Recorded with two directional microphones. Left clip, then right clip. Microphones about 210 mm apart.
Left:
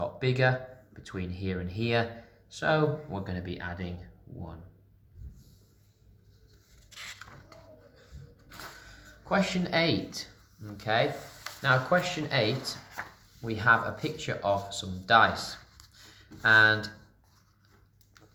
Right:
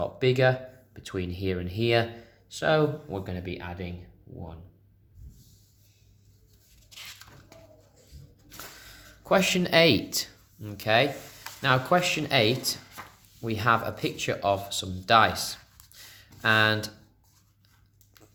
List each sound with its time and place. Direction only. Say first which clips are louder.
0.0 s speech: right 4 dB; 40° right (ahead or behind)
8.8 s speech: right 2 dB; 50° right (ahead or behind)